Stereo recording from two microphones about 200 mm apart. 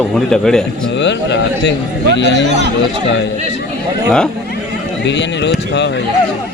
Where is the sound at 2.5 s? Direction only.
60° right (ahead or behind).